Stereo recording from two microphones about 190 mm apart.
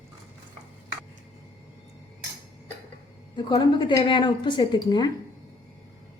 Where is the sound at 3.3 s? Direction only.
25° left (ahead or behind).